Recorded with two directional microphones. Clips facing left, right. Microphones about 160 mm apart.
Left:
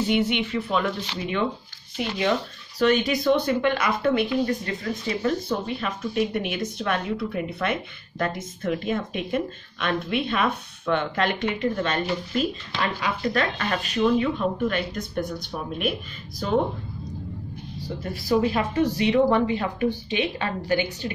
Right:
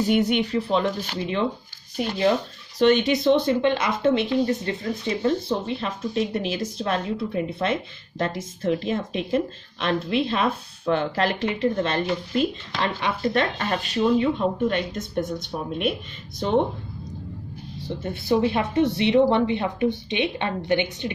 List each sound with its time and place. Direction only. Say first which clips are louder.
0.0 s speech: right 2 dB; 45° right (ahead or behind)
2.0 s speech: right 3 dB; 35° right (ahead or behind)
2.8 s speech: right 3 dB; 25° right (ahead or behind)
17.7 s speech: right 2 dB; 25° right (ahead or behind)